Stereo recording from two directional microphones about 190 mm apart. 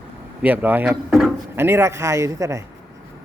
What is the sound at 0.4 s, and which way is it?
Speech, 10° right (ahead or behind).